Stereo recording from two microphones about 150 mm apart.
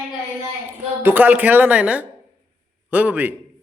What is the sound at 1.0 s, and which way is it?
Speech, 10° right (ahead or behind).